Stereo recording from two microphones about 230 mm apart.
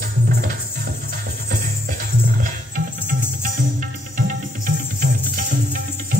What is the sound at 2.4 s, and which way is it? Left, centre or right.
Music, right.